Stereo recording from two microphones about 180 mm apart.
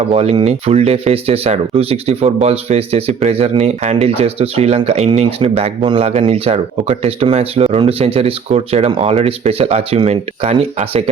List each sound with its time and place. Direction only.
0.1 s speech: 35° right (ahead or behind)